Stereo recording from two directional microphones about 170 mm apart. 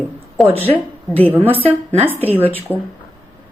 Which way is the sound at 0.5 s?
10° left (ahead or behind).